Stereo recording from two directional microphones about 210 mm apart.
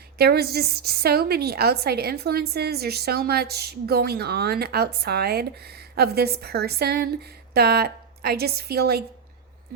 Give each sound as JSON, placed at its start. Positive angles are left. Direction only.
{"t": 0.2, "sound": "a woman's voice", "side_deg": -50}